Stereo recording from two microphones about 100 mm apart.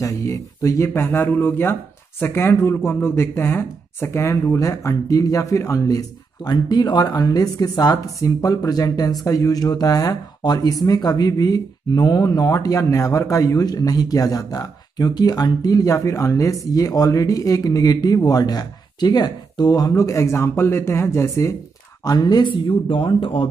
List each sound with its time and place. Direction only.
0.0 s speech: 30° left (ahead or behind)
19.9 s speech: 30° left (ahead or behind)
22.0 s speech: 40° left (ahead or behind); by 23.5 s 60° left (ahead or behind)